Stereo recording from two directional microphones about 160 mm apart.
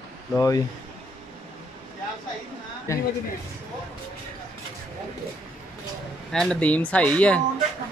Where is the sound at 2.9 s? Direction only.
20° left (ahead or behind).